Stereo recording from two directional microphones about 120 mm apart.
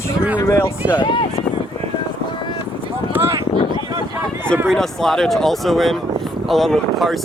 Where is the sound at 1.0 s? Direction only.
45° left (ahead or behind).